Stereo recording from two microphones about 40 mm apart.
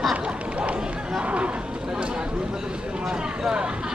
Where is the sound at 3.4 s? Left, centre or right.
Right.